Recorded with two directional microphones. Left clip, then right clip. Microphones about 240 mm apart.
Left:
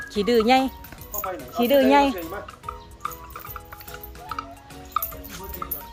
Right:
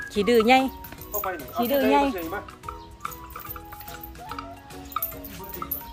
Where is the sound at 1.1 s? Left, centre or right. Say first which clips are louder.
Right 1 dB; centre.